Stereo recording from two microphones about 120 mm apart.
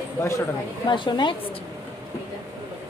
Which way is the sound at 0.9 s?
40° left (ahead or behind).